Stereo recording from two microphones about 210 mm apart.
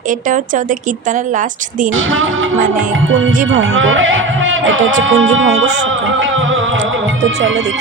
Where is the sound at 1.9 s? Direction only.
70° right (ahead or behind).